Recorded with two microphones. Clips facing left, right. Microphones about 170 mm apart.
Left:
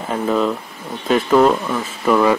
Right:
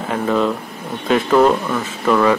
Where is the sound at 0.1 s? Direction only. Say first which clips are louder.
Even; centre (ahead or behind).